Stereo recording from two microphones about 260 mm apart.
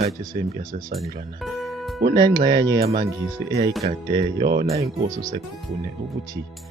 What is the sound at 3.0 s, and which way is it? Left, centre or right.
Speech, centre.